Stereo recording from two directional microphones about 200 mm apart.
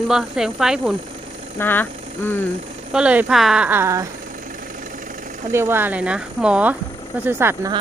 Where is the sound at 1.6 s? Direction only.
10° left (ahead or behind).